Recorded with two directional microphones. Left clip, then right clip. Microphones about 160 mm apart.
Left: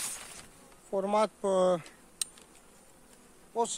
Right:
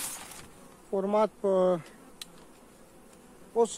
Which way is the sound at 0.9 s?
55° left (ahead or behind).